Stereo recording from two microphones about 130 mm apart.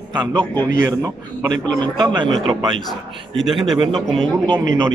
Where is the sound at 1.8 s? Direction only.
35° right (ahead or behind).